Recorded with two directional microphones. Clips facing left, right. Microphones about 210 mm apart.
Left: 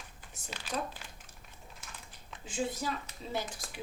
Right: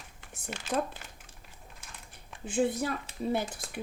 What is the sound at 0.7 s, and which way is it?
Speech, 50° right (ahead or behind).